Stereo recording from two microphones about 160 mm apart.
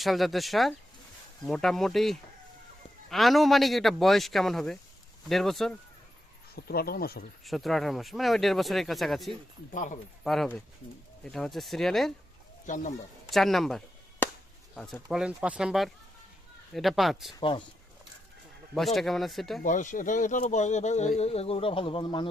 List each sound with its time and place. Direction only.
0.0 s speech: centre (ahead or behind)
6.6 s speech: 75° left (ahead or behind)
7.4 s speech: centre (ahead or behind)
9.7 s speech: 55° left (ahead or behind)
10.2 s speech: centre (ahead or behind)
12.6 s speech: 50° left (ahead or behind)
13.3 s speech: centre (ahead or behind)
14.2 s chop: 10° left (ahead or behind)
15.1 s speech: 5° right (ahead or behind)
18.9 s speech: centre (ahead or behind)
19.6 s speech: 50° left (ahead or behind); by 22.3 s 30° left (ahead or behind)